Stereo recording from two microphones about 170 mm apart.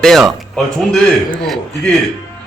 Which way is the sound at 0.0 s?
Centre (ahead or behind).